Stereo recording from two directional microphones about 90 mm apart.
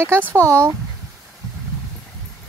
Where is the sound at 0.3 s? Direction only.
30° right (ahead or behind).